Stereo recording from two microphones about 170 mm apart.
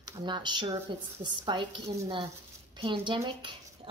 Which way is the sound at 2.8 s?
30° right (ahead or behind).